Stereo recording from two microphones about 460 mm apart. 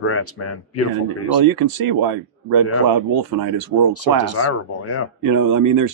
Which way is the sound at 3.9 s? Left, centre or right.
Left.